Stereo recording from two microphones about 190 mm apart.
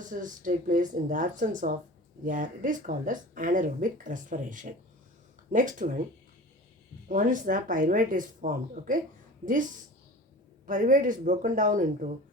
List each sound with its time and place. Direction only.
0.1 s speech: 45° right (ahead or behind)
7.1 s speech: 45° right (ahead or behind)
10.7 s speech: 45° right (ahead or behind)